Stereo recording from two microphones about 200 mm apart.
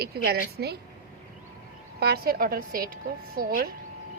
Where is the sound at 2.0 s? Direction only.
50° right (ahead or behind).